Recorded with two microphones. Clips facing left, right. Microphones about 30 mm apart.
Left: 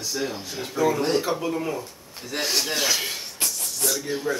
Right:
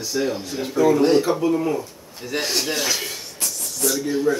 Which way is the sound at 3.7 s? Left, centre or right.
Centre.